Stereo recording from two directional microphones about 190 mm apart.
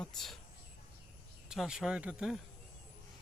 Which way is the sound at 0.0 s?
Centre (ahead or behind).